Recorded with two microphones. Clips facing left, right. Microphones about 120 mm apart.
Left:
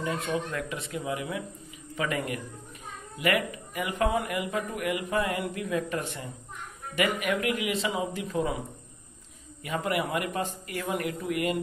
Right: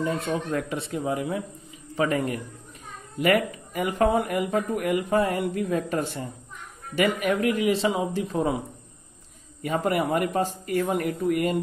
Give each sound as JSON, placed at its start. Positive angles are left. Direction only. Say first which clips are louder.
{"t": 0.0, "sound": "a man's voice", "louder": "right 3 dB", "side_deg": -35}
{"t": 9.6, "sound": "a man's voice", "louder": "right 5 dB", "side_deg": -35}